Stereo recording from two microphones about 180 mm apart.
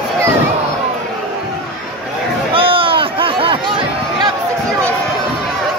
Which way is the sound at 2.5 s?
30° right (ahead or behind).